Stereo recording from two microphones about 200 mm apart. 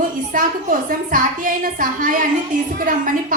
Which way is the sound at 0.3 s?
45° right (ahead or behind).